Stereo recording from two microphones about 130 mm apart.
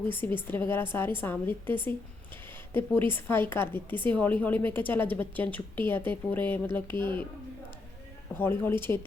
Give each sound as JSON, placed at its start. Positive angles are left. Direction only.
{"t": 0.1, "sound": "a woman's voice", "side_deg": 15}
{"t": 3.1, "sound": "a woman's voice", "side_deg": 15}
{"t": 8.4, "sound": "a woman's voice", "side_deg": 15}